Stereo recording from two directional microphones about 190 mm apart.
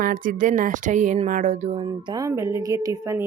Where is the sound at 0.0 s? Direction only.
45° right (ahead or behind).